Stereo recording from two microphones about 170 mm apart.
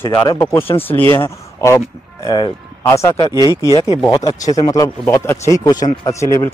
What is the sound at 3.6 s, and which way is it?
Speech, 25° left (ahead or behind).